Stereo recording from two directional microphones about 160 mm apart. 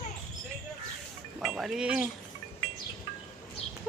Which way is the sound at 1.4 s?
Centre (ahead or behind).